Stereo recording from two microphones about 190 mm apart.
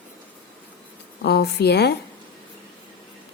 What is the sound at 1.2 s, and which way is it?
Speech, 60° left (ahead or behind).